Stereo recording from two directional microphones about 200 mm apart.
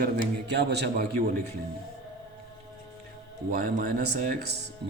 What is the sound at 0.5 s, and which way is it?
Speech, 55° right (ahead or behind).